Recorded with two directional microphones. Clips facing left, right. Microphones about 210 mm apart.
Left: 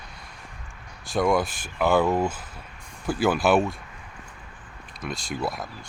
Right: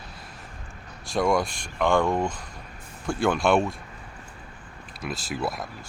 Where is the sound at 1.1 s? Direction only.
Centre (ahead or behind).